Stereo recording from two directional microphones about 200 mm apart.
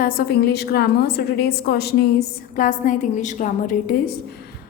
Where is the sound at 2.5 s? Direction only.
40° left (ahead or behind).